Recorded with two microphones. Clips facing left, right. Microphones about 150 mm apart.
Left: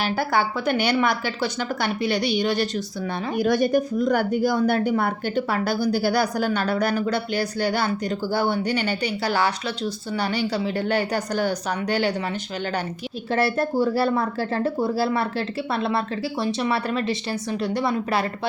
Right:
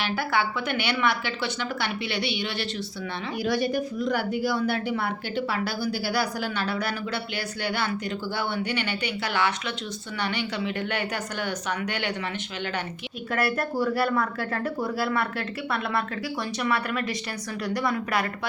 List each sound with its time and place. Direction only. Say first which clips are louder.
0.0 s a woman's voice: left 4 dB; 40° left (ahead or behind)
13.3 s speech: left 5 dB; 30° left (ahead or behind)